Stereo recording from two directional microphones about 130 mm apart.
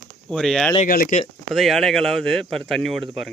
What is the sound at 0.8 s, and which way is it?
Speech, 80° left.